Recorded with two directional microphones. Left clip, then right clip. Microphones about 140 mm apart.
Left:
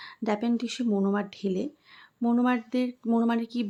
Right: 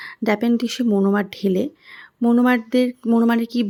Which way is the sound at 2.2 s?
30° right (ahead or behind).